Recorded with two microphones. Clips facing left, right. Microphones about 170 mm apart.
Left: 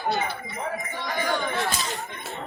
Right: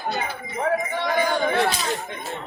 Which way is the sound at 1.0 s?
60° right (ahead or behind).